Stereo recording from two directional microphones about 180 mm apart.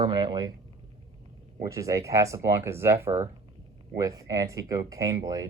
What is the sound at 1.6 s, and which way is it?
Speech, 15° right (ahead or behind).